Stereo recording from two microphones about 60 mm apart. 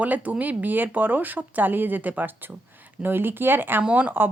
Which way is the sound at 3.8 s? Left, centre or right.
Right.